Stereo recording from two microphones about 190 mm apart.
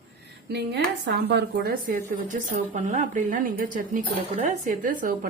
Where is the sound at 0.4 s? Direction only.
65° right (ahead or behind).